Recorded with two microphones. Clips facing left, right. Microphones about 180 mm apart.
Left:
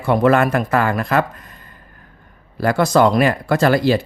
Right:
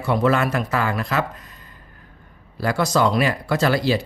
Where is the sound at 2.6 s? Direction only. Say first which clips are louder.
Left 5 dB; 55° left (ahead or behind).